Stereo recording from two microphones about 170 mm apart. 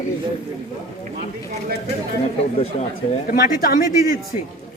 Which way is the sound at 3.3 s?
55° left (ahead or behind).